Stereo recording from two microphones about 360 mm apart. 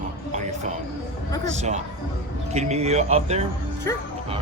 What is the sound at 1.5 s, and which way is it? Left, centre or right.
A man's voice, centre.